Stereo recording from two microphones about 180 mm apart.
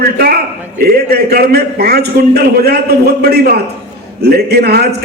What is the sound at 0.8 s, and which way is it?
A man's voice, 60° right (ahead or behind).